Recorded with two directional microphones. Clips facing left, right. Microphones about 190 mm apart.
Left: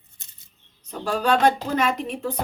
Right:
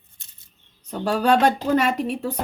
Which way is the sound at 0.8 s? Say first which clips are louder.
Right 3 dB; 40° right (ahead or behind).